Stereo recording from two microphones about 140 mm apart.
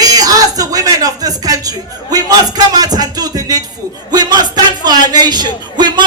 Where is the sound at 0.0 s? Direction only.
25° right (ahead or behind).